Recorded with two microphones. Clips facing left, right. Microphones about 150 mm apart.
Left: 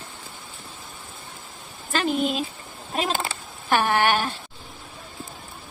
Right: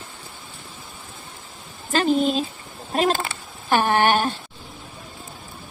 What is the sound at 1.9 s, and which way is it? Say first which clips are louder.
Speech: right 4 dB; 35° right (ahead or behind).